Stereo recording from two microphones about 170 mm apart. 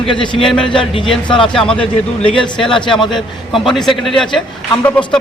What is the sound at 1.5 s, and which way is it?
A man's voice, 5° left (ahead or behind).